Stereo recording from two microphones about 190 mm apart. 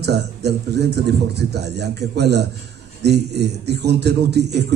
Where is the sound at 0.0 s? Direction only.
60° right (ahead or behind).